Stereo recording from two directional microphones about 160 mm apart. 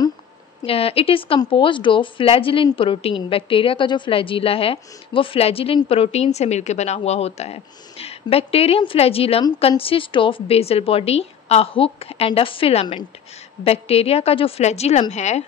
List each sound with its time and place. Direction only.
0.7 s a woman's voice: 35° left (ahead or behind)